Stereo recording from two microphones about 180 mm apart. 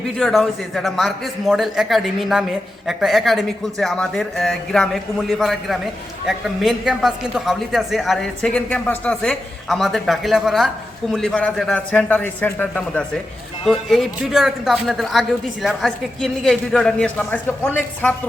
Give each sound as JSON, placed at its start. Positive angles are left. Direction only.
{"t": 0.2, "sound": "a man's voice", "side_deg": 0}